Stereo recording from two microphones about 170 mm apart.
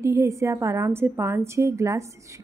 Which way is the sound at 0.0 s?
15° right (ahead or behind).